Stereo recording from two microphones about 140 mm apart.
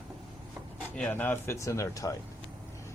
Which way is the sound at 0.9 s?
10° left (ahead or behind).